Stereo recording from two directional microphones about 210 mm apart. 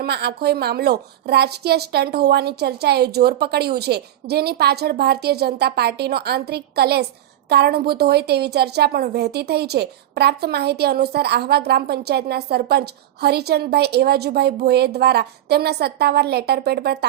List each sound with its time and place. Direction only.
0.0 s a woman's voice: 50° right (ahead or behind)